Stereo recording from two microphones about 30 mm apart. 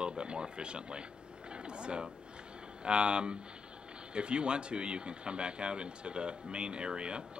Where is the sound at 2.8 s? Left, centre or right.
Right.